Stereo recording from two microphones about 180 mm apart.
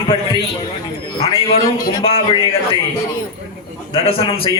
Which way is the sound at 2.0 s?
30° left (ahead or behind).